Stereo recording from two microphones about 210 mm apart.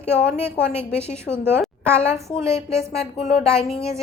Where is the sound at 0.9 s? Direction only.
5° left (ahead or behind).